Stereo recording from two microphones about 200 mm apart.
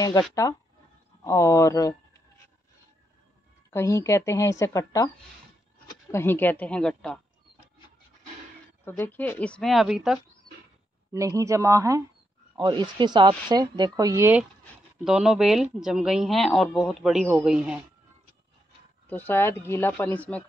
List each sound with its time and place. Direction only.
0.3 s speech: 15° left (ahead or behind)
3.7 s speech: 15° left (ahead or behind)
8.8 s speech: 10° left (ahead or behind)
11.1 s speech: 15° right (ahead or behind)
14.6 s speech: centre (ahead or behind)
19.0 s speech: 10° left (ahead or behind)